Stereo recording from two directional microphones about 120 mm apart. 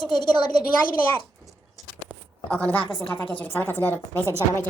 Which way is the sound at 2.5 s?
10° left (ahead or behind).